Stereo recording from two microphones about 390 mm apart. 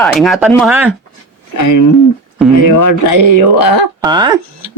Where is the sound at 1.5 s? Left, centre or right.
Left.